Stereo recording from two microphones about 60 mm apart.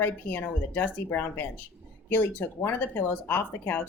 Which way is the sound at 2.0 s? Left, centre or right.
Left.